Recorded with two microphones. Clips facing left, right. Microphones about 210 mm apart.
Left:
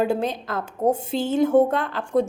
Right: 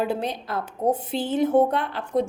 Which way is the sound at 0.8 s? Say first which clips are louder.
Left 2 dB; 45° left (ahead or behind).